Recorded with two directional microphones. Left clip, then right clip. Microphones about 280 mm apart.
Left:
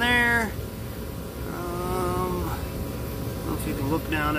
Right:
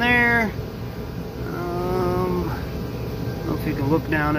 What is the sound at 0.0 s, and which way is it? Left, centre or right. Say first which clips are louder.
Cat: right 3 dB; centre.